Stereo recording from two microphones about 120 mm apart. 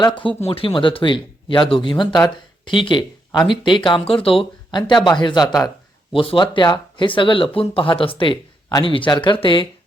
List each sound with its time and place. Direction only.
0.3 s speech: 55° left (ahead or behind)
4.8 s a man's voice: 40° left (ahead or behind)